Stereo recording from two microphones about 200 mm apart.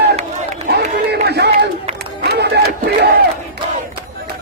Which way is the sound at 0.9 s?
55° right (ahead or behind).